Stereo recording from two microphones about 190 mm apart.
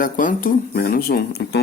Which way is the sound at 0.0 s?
45° left (ahead or behind).